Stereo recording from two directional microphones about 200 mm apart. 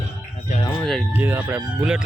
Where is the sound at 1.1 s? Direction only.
10° right (ahead or behind).